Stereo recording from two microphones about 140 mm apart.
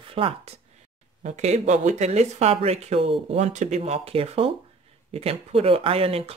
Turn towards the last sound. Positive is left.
turn(degrees=-45)  # may be behind; listen again after turning